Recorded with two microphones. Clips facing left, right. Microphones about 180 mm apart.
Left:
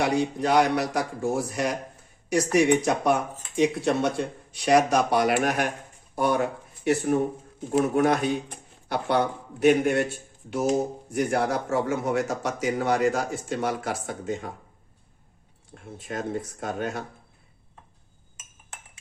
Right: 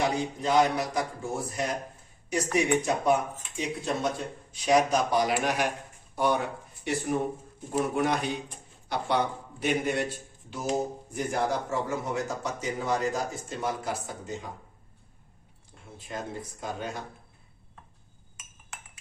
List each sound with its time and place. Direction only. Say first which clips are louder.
0.0 s speech: left 4 dB; 70° left (ahead or behind)
7.7 s speech: left 5 dB; 60° left (ahead or behind)
11.1 s speech: left 4 dB; 70° left (ahead or behind)
15.7 s speech: left 4 dB; 65° left (ahead or behind)